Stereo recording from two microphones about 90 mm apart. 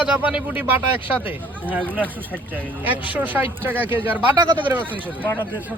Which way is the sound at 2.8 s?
20° right (ahead or behind).